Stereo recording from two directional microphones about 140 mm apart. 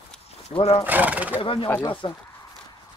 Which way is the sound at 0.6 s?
45° left (ahead or behind).